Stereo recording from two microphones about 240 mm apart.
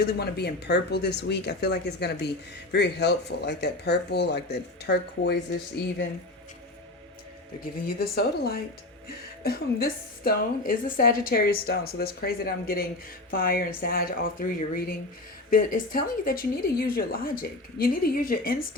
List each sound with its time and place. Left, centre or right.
0.0 s speech: left
7.9 s a woman's voice: left